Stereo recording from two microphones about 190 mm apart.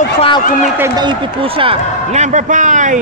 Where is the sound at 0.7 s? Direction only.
15° right (ahead or behind).